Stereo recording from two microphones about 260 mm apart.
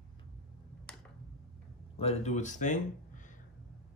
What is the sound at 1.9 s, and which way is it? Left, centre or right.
Speech, left.